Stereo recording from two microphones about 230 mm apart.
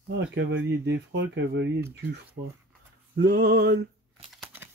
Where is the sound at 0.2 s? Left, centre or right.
Right.